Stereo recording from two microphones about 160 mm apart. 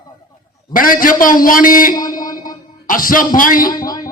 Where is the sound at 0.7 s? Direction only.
60° left (ahead or behind).